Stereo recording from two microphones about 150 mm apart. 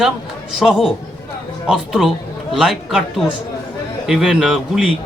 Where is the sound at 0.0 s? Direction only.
Centre (ahead or behind).